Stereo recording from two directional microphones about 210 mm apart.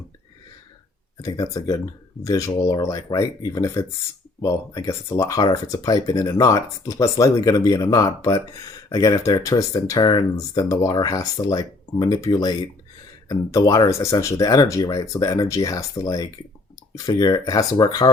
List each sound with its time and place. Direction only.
1.2 s speech: 15° left (ahead or behind)